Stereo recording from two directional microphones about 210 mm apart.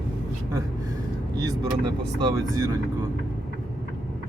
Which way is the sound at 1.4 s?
20° right (ahead or behind).